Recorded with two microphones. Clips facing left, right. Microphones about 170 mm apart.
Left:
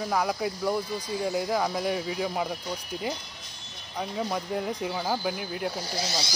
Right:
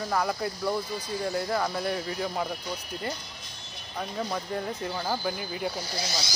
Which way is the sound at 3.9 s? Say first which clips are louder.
Left 2 dB; 10° left (ahead or behind).